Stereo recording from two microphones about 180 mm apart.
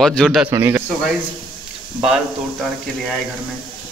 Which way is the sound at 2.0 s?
5° right (ahead or behind).